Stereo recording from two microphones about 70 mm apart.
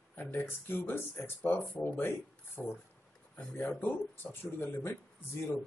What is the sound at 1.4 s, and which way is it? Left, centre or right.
Speech, left.